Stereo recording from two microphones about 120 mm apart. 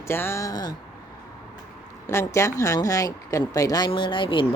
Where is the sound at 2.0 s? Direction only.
25° left (ahead or behind).